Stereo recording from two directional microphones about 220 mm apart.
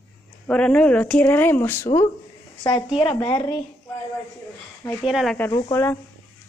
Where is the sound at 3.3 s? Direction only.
20° left (ahead or behind).